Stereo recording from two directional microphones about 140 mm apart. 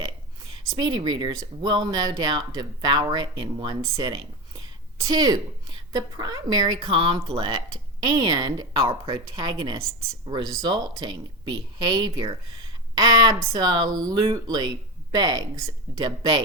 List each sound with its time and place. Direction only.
0.8 s a woman's voice: 30° right (ahead or behind)
3.8 s a woman's voice: 20° right (ahead or behind)